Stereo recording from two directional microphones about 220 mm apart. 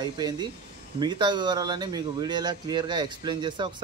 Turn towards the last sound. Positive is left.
turn(degrees=-20)  # may be behind; listen again after turning